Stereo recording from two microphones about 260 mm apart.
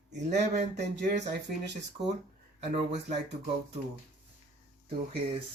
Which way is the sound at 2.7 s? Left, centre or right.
Right.